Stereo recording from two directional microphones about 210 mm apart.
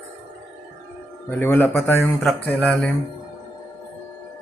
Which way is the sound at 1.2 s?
10° left (ahead or behind).